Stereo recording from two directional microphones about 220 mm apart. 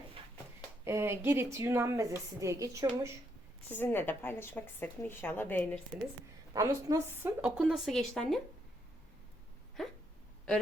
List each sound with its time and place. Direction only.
0.9 s a woman's voice: 10° right (ahead or behind)
3.7 s a woman's voice: 10° left (ahead or behind)
6.5 s a woman's voice: 15° right (ahead or behind); by 8.4 s centre (ahead or behind)
9.8 s hiccup: centre (ahead or behind)